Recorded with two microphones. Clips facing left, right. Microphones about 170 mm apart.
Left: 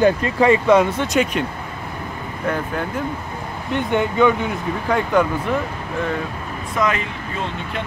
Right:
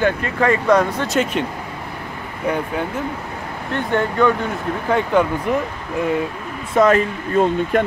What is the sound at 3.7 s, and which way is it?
Speech, 15° left (ahead or behind).